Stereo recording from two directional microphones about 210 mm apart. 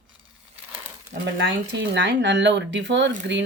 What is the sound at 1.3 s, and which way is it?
Speech, 60° right (ahead or behind).